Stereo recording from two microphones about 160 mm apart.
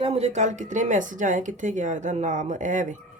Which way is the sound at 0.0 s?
40° right (ahead or behind).